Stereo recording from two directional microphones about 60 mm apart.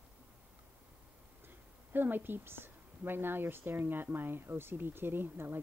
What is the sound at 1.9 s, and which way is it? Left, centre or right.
A woman's voice, right.